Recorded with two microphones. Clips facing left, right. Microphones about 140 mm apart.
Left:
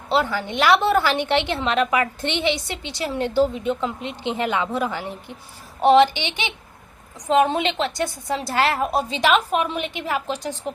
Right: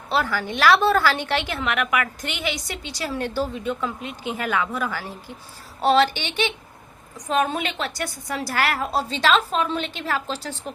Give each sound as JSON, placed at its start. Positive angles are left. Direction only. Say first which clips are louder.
{"t": 0.1, "sound": "a woman's voice", "louder": "left 2 dB", "side_deg": 20}